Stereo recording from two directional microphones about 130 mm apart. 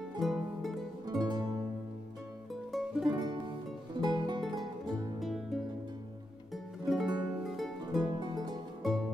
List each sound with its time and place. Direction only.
0.2 s music: centre (ahead or behind)
1.0 s music: 30° right (ahead or behind)
2.7 s music: centre (ahead or behind)
3.1 s music: 30° right (ahead or behind)
5.2 s music: centre (ahead or behind)
8.2 s music: 35° right (ahead or behind)
8.8 s music: centre (ahead or behind)